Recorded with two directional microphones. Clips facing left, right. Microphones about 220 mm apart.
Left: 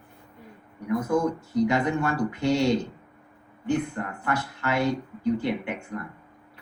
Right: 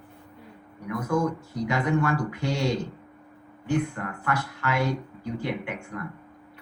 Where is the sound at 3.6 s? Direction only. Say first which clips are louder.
Even; 25° left (ahead or behind).